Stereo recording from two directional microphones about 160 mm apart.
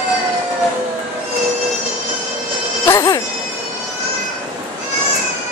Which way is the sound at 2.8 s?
20° left (ahead or behind).